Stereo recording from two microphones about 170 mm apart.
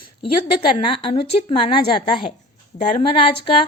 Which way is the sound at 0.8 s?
30° left (ahead or behind).